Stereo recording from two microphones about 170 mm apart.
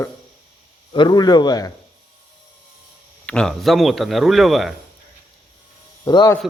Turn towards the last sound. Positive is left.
turn(degrees=25)  # may be behind; listen again after turning